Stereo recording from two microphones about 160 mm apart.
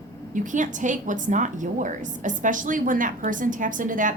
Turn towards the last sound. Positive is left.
turn(degrees=-55)  # may be behind; listen again after turning